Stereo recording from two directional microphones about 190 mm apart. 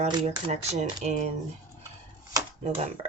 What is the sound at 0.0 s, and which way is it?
Speech, 35° right (ahead or behind).